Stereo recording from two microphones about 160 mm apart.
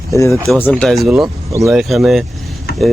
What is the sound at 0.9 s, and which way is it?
Speech, centre (ahead or behind).